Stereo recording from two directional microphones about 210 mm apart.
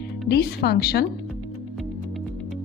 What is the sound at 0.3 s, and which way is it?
Speech, 50° left (ahead or behind).